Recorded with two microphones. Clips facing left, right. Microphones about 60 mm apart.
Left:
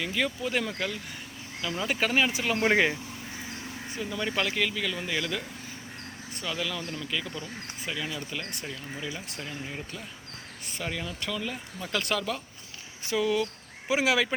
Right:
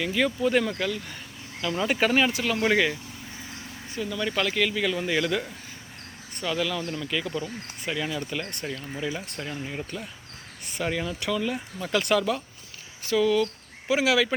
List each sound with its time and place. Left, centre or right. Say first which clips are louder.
0.0 s speech: right 5 dB; centre
1.7 s speech: right 4 dB; centre
2.3 s speech: right 1 dB; centre
2.6 s speech: even; left; by 4.7 s centre
4.7 s speech: right 5 dB; centre
9.4 s speech: right 2 dB; centre
10.8 s speech: right 6 dB; centre
13.1 s speech: right 4 dB; centre